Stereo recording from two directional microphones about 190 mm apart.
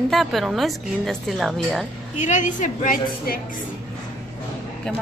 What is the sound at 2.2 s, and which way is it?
A woman's voice, 40° left (ahead or behind).